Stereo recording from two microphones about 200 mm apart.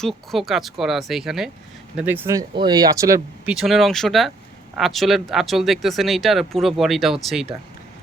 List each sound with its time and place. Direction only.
0.0 s speech: centre (ahead or behind); by 3.5 s 15° right (ahead or behind)
3.5 s speech: centre (ahead or behind)